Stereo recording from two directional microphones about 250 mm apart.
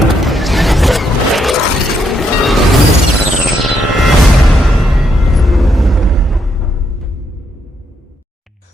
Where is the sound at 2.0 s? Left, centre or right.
Centre.